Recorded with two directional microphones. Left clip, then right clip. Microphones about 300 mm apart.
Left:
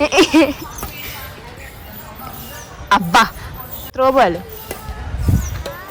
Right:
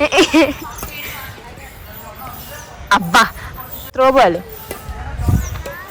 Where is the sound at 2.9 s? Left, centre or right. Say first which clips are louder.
Even; centre.